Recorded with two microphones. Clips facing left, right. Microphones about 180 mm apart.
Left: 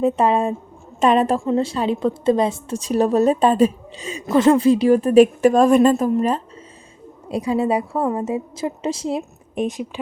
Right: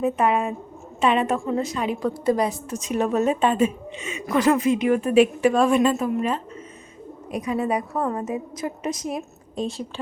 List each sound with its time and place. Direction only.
0.0 s a woman's voice: 30° left (ahead or behind)
9.6 s a woman's voice: 15° left (ahead or behind)